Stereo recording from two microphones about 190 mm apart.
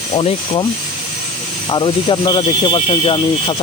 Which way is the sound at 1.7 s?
25° left (ahead or behind).